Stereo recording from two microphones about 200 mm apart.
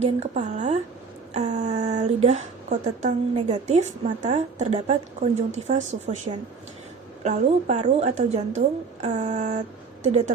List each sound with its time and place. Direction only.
0.0 s a woman's voice: 35° right (ahead or behind)